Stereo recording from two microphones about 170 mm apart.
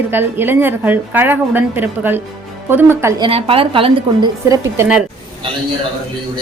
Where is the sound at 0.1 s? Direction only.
10° right (ahead or behind).